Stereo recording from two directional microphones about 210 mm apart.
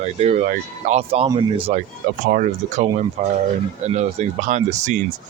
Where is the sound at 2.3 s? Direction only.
40° right (ahead or behind).